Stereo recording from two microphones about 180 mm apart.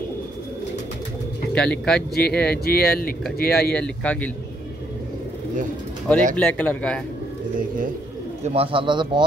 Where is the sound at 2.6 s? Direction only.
60° left (ahead or behind).